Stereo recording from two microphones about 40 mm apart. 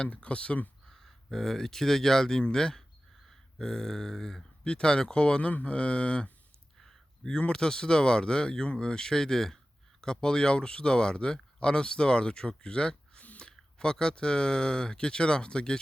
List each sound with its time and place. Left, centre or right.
0.0 s speech: left
0.9 s speech: centre
5.4 s speech: left
6.7 s a sound: centre
7.3 s speech: left
13.2 s a sound: left
13.7 s speech: centre